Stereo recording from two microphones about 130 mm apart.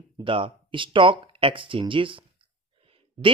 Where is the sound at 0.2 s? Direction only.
40° right (ahead or behind).